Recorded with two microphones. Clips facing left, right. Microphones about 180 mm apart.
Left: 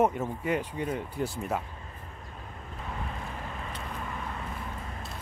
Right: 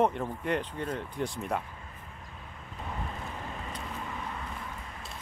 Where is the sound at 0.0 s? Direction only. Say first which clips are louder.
Left 1 dB; 5° left (ahead or behind).